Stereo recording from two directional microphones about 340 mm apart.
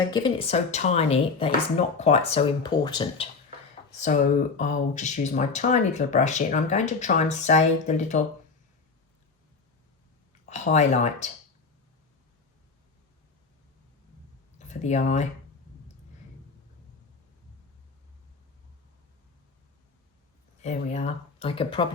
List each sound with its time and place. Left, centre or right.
0.1 s speech: centre
10.4 s speech: centre
14.7 s speech: left
20.6 s speech: centre